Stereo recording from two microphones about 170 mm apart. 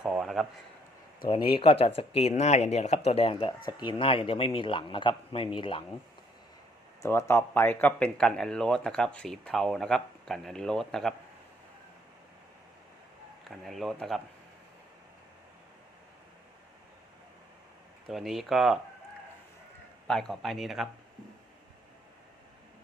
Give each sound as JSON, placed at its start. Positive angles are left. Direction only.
{"t": 0.0, "sound": "a sound", "side_deg": -5}
{"t": 1.3, "sound": "speech", "side_deg": 30}
{"t": 7.0, "sound": "speech", "side_deg": 15}
{"t": 13.5, "sound": "speech", "side_deg": 0}
{"t": 18.1, "sound": "speech", "side_deg": 0}
{"t": 20.1, "sound": "speech", "side_deg": 5}